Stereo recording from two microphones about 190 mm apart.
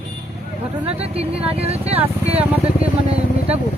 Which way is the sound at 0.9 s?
30° right (ahead or behind).